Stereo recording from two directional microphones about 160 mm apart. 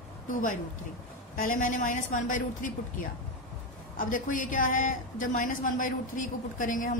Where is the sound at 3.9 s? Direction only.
55° left (ahead or behind).